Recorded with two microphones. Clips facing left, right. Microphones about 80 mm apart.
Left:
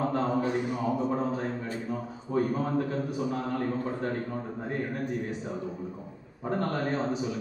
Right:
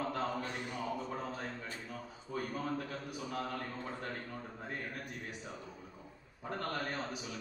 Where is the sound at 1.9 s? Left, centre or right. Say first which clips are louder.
Left 11 dB; left.